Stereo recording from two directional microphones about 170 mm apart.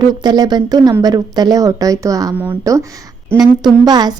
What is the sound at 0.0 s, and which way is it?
A woman's voice, 25° right (ahead or behind).